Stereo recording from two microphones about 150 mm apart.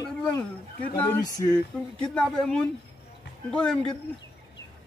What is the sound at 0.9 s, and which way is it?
Speech, 20° left (ahead or behind).